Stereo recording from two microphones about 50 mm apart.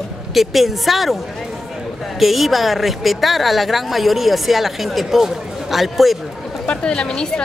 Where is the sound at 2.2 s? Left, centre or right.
Centre.